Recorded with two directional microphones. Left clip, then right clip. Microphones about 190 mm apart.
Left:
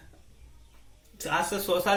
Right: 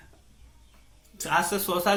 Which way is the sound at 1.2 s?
35° right (ahead or behind).